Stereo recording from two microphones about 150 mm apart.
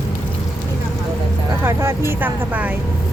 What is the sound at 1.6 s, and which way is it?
Speech, 15° right (ahead or behind).